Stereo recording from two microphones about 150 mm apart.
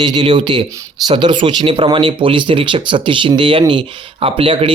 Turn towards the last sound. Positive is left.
turn(degrees=-35)  # may be behind; listen again after turning